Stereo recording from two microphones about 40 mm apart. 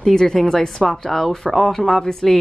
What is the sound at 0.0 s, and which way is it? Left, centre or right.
Speech, centre.